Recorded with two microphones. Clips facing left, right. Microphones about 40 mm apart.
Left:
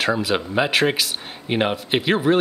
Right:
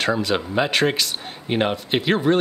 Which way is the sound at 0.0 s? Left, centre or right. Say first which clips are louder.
Even; centre.